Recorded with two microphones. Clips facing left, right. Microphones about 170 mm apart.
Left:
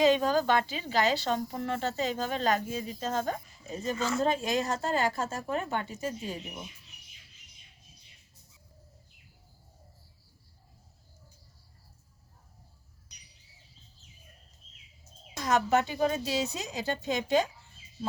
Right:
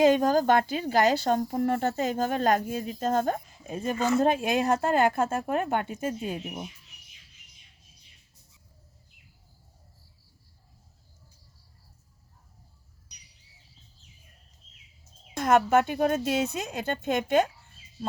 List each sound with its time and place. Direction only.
0.0 s a woman's voice: 50° right (ahead or behind)
15.4 s speech: 55° right (ahead or behind)